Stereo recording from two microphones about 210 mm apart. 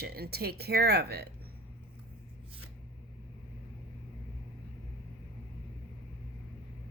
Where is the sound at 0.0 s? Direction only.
50° right (ahead or behind).